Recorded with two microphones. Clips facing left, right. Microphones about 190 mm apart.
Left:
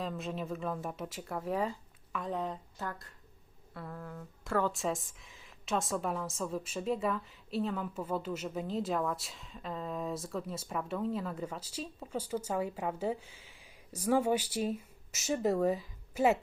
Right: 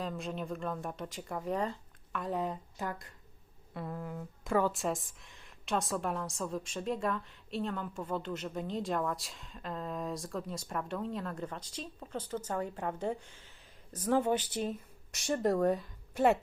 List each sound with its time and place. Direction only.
0.0 s a woman's voice: centre (ahead or behind); by 4.7 s 15° right (ahead or behind)
4.7 s a woman's voice: centre (ahead or behind)